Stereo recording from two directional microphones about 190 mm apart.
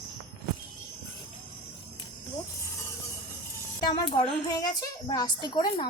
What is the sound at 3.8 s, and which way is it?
A woman's voice, 20° left (ahead or behind).